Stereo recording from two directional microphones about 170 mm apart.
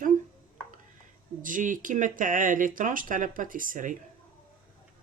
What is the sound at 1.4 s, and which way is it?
Speech, 50° right (ahead or behind).